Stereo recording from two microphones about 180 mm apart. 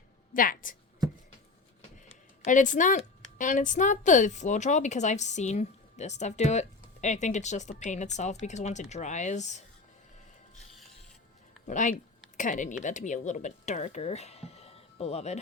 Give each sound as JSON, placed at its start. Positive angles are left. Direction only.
{"t": 0.3, "sound": "a woman's voice", "side_deg": 50}
{"t": 2.0, "sound": "a woman's voice", "side_deg": 40}
{"t": 11.6, "sound": "a woman's voice", "side_deg": 45}